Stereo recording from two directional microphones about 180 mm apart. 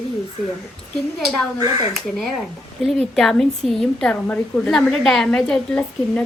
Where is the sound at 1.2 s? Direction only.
Centre (ahead or behind).